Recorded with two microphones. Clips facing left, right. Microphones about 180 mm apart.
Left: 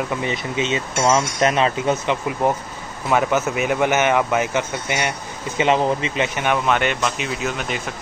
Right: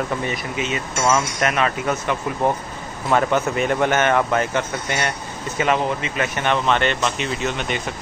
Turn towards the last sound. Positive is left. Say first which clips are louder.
# right 1 dB
turn(degrees=5)  # may be behind; listen again after turning